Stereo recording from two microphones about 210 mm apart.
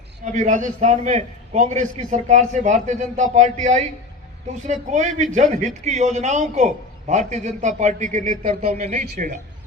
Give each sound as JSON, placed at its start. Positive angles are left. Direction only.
{"t": 0.3, "sound": "a man's voice", "side_deg": -35}